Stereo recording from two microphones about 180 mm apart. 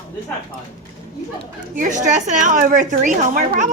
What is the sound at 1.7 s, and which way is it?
A woman's voice, 45° right (ahead or behind).